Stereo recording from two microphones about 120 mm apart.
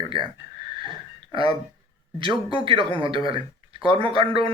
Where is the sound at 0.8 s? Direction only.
45° right (ahead or behind).